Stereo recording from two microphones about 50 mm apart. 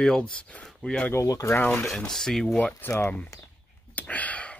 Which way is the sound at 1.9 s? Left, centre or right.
Centre.